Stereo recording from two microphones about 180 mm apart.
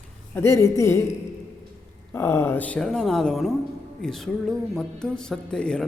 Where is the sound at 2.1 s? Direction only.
15° left (ahead or behind).